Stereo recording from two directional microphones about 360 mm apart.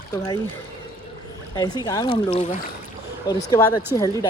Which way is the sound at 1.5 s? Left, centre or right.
Centre.